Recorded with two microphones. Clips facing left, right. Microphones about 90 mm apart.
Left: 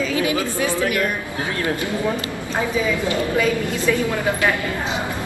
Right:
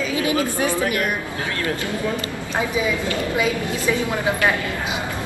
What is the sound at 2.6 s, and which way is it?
A woman's voice, 15° right (ahead or behind).